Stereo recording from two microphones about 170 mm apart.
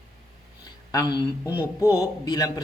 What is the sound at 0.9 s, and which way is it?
Speech, 25° left (ahead or behind).